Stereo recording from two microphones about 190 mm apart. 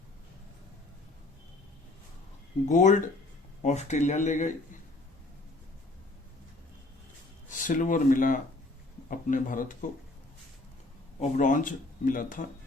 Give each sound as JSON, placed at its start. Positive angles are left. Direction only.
{"t": 2.6, "sound": "speech", "side_deg": 40}
{"t": 7.6, "sound": "speech", "side_deg": 45}
{"t": 11.2, "sound": "speech", "side_deg": 40}